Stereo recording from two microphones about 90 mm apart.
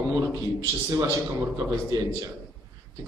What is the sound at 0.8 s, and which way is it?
Speech, 40° right (ahead or behind).